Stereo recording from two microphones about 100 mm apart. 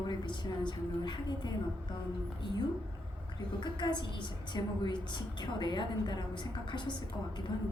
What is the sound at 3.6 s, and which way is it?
A woman's voice, 50° left (ahead or behind).